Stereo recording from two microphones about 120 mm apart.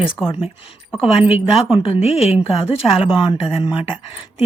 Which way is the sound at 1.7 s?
50° left (ahead or behind).